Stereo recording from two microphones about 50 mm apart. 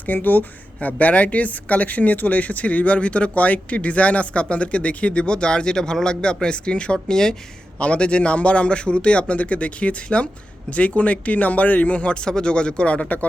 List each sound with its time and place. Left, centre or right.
0.0 s a woman's voice: left